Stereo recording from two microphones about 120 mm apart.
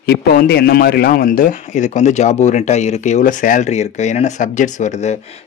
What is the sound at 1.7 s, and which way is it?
Speech, 90° left.